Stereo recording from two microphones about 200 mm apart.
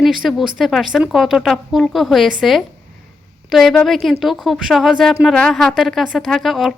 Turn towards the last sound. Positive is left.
turn(degrees=0)  # may be behind; listen again after turning